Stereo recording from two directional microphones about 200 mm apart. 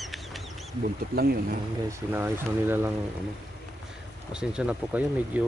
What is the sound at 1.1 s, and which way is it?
Speech, 50° right (ahead or behind).